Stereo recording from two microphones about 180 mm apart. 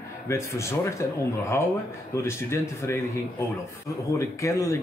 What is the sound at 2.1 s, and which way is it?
Speech, 15° left (ahead or behind).